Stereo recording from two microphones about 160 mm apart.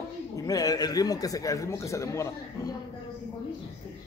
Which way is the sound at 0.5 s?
25° left (ahead or behind).